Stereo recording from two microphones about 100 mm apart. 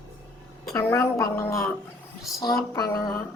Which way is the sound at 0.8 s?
25° left (ahead or behind).